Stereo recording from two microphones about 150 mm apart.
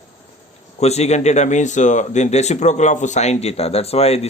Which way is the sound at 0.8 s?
45° left (ahead or behind).